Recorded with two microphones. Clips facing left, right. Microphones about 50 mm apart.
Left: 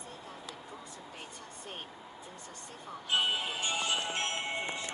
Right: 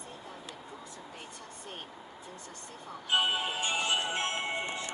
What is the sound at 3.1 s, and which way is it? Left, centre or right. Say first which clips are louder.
Speech: right 2 dB; centre.